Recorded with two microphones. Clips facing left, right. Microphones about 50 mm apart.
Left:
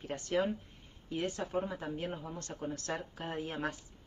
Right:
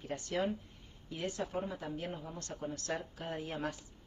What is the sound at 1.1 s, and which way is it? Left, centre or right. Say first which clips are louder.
Speech: left 3 dB; left.